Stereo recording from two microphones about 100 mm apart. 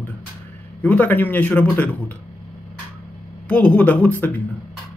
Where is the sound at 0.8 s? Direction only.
15° left (ahead or behind).